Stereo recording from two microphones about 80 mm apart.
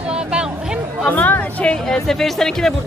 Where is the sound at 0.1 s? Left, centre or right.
Centre.